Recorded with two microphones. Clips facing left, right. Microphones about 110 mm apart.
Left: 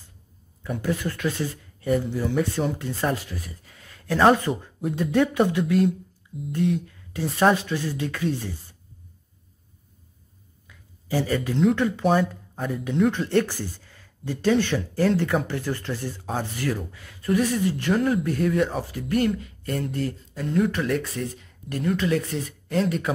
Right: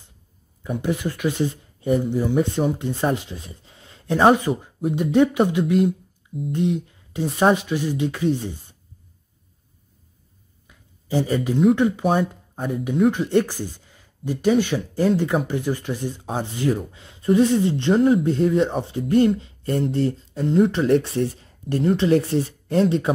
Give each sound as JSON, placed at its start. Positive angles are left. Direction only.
{"t": 0.7, "sound": "speech", "side_deg": -15}
{"t": 10.7, "sound": "speech", "side_deg": -20}